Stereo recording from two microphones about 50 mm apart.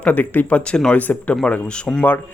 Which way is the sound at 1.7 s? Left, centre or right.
Centre.